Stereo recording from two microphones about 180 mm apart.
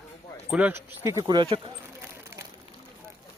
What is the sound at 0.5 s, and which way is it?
Speech, 10° right (ahead or behind).